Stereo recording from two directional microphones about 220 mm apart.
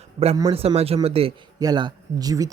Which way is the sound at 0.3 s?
15° right (ahead or behind).